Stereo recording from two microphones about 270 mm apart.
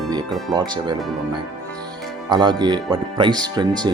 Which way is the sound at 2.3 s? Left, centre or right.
Centre.